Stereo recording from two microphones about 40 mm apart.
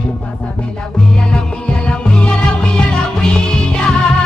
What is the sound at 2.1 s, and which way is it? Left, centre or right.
Music, left.